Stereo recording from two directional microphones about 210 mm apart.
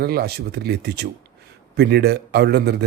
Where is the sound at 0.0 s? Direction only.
50° right (ahead or behind).